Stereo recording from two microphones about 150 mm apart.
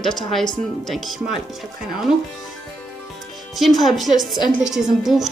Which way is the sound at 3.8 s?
Centre (ahead or behind).